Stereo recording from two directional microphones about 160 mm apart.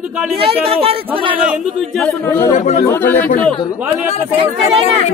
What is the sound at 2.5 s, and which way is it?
Speech, 55° left (ahead or behind).